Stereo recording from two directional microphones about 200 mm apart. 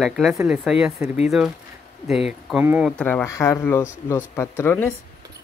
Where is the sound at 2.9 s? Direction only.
5° left (ahead or behind).